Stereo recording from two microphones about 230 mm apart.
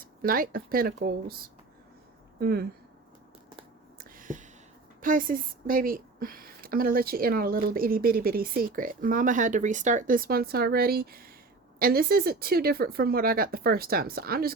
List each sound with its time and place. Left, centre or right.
0.0 s a woman's voice: right
3.9 s a sound: right
4.9 s a woman's voice: right